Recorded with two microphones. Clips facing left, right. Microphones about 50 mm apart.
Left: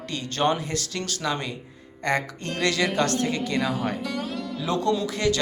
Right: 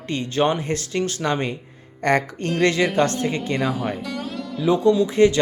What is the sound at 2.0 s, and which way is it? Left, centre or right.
Music, right.